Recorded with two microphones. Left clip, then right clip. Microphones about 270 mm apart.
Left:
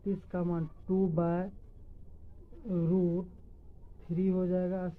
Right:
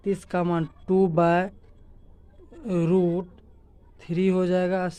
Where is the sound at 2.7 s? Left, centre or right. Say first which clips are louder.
Right 9 dB; right.